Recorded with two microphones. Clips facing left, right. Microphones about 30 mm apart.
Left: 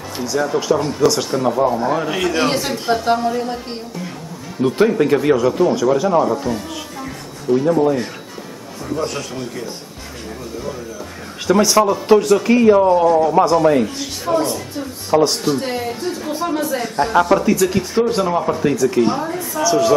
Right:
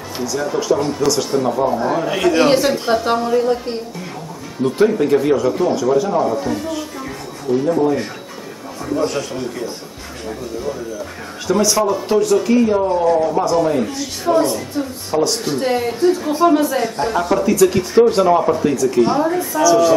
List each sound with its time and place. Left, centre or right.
0.2 s speech: centre
4.6 s speech: centre
6.2 s speech: centre
8.8 s speech: centre
11.4 s speech: centre
14.2 s speech: centre
15.0 s a man's voice: centre
15.4 s speech: centre
16.3 s a woman's voice: centre
17.1 s speech: centre
17.4 s speech: centre
18.6 s speech: centre